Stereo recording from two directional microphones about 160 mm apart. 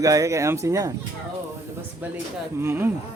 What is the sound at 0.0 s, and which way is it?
Speech, 20° right (ahead or behind).